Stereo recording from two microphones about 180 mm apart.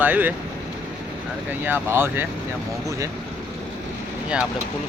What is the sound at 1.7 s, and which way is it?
Speech, 10° right (ahead or behind).